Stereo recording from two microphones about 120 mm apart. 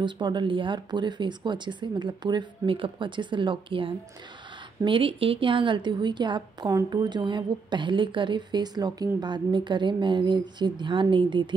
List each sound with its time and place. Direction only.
0.0 s a woman's voice: 40° right (ahead or behind)